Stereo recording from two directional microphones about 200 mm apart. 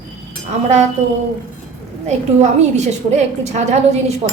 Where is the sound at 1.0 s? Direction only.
35° right (ahead or behind).